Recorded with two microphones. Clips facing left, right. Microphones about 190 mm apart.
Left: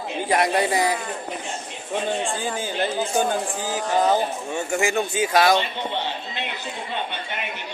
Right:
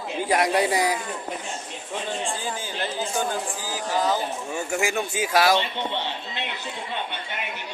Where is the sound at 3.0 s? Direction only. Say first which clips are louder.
Left 3 dB; 50° left (ahead or behind).